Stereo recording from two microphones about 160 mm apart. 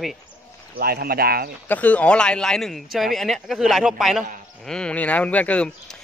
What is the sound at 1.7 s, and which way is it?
Speech, 10° left (ahead or behind).